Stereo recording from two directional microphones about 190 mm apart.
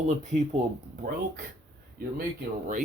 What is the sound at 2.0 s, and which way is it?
Speech, 55° right (ahead or behind).